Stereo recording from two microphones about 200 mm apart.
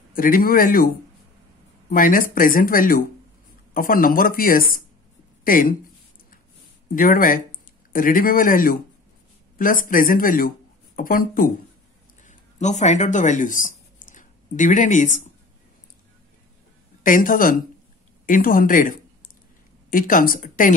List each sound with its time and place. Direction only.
0.1 s speech: 45° left (ahead or behind)
7.0 s speech: 45° left (ahead or behind)
17.0 s speech: 45° left (ahead or behind)